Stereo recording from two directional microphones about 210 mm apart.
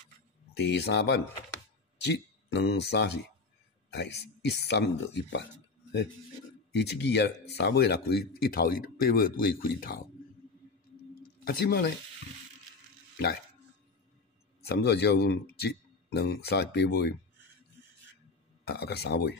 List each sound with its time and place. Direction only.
0.6 s speech: 50° left (ahead or behind)
6.7 s speech: 55° left (ahead or behind)
11.4 s speech: 45° left (ahead or behind)
14.7 s speech: 50° left (ahead or behind)
18.7 s speech: 50° left (ahead or behind)